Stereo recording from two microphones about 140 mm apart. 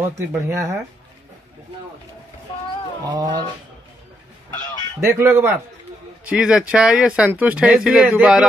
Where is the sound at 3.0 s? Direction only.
30° right (ahead or behind).